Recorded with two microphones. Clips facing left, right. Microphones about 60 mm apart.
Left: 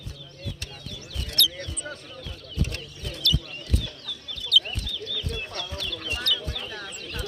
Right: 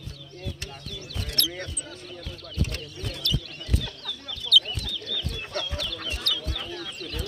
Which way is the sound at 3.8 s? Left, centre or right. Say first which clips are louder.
Right 1 dB; right.